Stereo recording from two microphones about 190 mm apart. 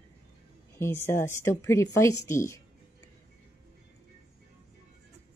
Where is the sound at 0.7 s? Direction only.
15° left (ahead or behind).